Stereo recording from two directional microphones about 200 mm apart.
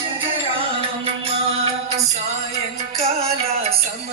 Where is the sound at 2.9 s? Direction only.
30° right (ahead or behind).